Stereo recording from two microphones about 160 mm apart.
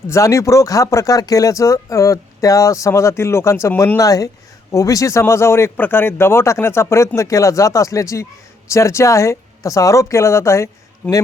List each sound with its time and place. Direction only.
0.1 s speech: 20° left (ahead or behind)